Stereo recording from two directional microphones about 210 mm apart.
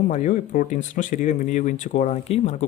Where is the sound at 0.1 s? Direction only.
35° left (ahead or behind).